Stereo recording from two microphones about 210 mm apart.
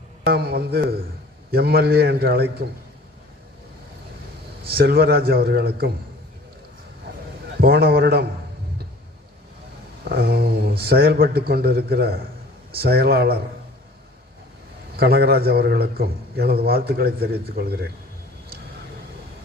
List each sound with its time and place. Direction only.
0.3 s a man's voice: 50° right (ahead or behind)
4.7 s a man's voice: 50° right (ahead or behind)
7.5 s a man's voice: 45° right (ahead or behind)
10.0 s a man's voice: 45° right (ahead or behind)
14.9 s a man's voice: 50° right (ahead or behind)